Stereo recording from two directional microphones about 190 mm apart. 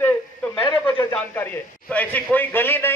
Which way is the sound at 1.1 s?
10° left (ahead or behind).